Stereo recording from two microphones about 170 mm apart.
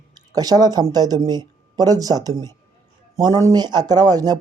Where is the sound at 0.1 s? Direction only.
25° right (ahead or behind).